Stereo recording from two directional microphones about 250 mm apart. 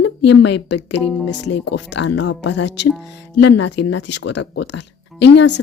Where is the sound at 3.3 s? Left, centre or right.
Left.